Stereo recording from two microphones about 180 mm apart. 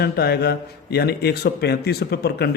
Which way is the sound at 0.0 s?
60° left (ahead or behind).